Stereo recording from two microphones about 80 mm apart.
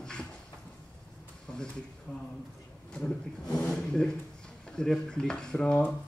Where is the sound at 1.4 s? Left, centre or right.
Centre.